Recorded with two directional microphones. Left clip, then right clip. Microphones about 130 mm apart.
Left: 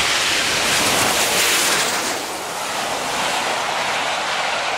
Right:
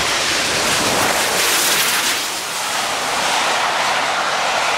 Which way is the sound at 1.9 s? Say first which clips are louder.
Right 4 dB; 35° right (ahead or behind).